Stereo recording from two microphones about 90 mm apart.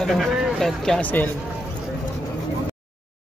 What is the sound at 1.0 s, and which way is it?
Speech, 20° left (ahead or behind).